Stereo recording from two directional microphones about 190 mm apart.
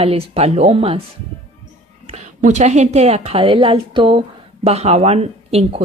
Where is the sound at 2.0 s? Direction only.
35° right (ahead or behind).